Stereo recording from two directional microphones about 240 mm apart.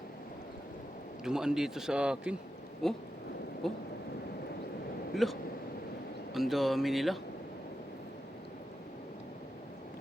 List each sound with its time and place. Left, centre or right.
1.2 s a man's voice: centre
5.1 s a man's voice: centre